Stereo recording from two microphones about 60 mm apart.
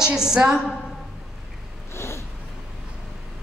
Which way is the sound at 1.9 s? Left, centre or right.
Left.